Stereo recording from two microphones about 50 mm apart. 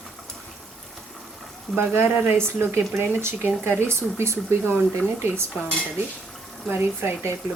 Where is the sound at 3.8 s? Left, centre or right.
Right.